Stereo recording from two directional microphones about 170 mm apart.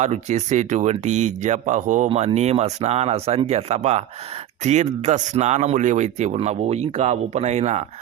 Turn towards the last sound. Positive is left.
turn(degrees=-40)  # may be behind; listen again after turning